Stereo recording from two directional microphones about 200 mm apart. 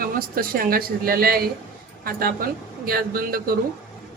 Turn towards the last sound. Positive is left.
turn(degrees=-45)  # may be behind; listen again after turning